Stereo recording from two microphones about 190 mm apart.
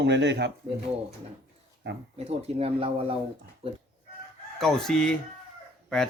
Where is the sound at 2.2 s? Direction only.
30° right (ahead or behind).